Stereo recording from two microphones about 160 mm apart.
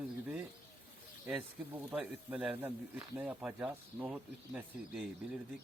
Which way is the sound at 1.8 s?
10° right (ahead or behind).